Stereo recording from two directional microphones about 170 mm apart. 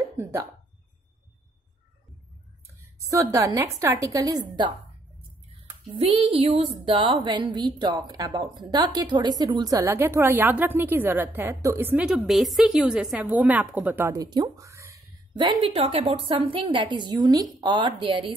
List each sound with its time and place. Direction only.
0.2 s speech: 15° right (ahead or behind)
2.8 s a woman's voice: 20° right (ahead or behind)
5.9 s a woman's voice: 35° right (ahead or behind); by 15.0 s 15° right (ahead or behind)
15.3 s a woman's voice: 30° right (ahead or behind)